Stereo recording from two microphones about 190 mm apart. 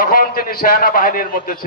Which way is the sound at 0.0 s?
50° left (ahead or behind).